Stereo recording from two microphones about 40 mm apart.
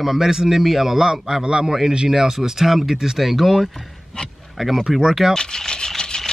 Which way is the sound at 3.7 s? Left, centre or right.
Centre.